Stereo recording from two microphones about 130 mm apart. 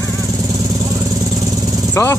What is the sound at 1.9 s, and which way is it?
Speech, 20° left (ahead or behind).